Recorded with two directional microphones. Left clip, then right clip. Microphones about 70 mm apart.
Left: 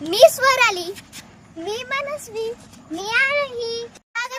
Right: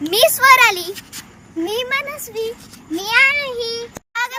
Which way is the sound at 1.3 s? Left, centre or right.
Left.